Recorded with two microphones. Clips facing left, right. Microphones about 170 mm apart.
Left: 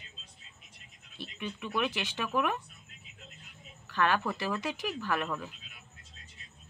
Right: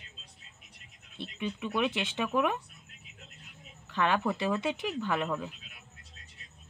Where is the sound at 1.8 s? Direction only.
25° right (ahead or behind).